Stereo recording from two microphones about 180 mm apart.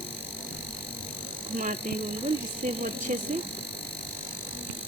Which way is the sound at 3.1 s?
45° right (ahead or behind).